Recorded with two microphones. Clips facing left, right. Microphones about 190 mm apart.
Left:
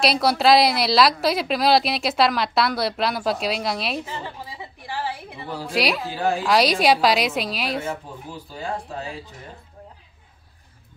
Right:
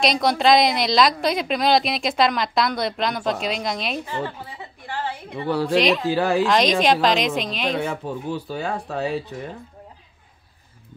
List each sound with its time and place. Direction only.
0.0 s a woman's voice: 5° left (ahead or behind)
5.4 s speech: 70° right (ahead or behind)
5.8 s a woman's voice: 10° left (ahead or behind)
6.0 s speech: 75° right (ahead or behind)
6.4 s a woman's voice: 10° left (ahead or behind)
7.8 s speech: 70° right (ahead or behind)